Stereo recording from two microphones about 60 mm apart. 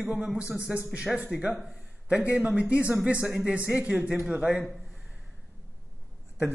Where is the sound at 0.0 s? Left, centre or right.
Centre; by 3.3 s right.